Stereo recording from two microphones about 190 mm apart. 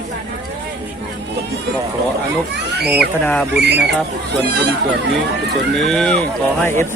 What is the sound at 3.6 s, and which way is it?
Speech, 60° right (ahead or behind).